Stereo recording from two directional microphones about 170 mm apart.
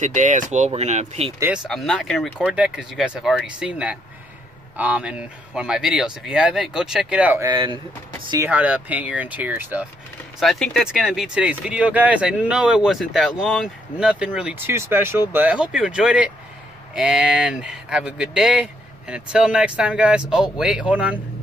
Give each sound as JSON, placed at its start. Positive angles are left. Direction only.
{"t": 0.0, "sound": "speech", "side_deg": -45}
{"t": 1.7, "sound": "speech", "side_deg": 0}
{"t": 7.4, "sound": "speech", "side_deg": -25}
{"t": 8.5, "sound": "speech", "side_deg": -10}
{"t": 10.4, "sound": "speech", "side_deg": 0}